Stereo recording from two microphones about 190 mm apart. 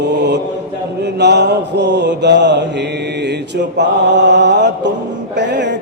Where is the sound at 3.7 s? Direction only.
65° right (ahead or behind).